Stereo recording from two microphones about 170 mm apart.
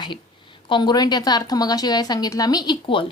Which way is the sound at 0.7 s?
25° left (ahead or behind).